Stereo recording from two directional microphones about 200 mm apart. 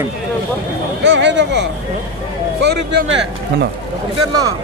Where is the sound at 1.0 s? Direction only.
65° right (ahead or behind).